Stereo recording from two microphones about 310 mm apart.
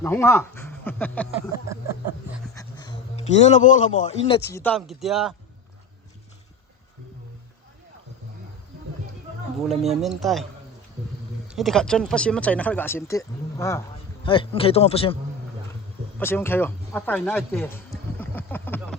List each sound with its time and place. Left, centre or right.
0.0 s speech: centre
2.6 s a man's voice: centre
4.5 s speech: centre
9.6 s speech: centre
11.4 s speech: centre
16.1 s speech: centre